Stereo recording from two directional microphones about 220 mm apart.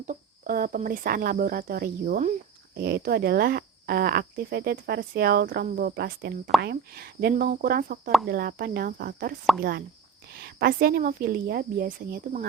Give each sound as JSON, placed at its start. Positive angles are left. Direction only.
{"t": 0.1, "sound": "speech", "side_deg": -40}
{"t": 10.3, "sound": "speech", "side_deg": -45}